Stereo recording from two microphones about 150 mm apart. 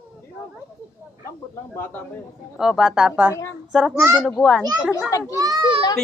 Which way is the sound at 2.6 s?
5° right (ahead or behind).